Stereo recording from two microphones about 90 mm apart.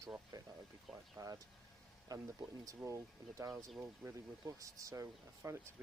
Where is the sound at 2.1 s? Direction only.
45° right (ahead or behind).